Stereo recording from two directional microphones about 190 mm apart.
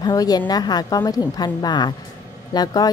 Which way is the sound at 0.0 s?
20° left (ahead or behind).